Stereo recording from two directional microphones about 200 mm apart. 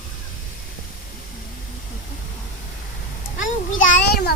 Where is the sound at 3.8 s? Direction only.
40° left (ahead or behind).